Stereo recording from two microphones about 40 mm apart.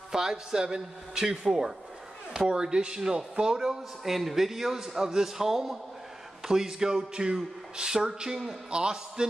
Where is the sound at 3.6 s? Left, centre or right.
Centre.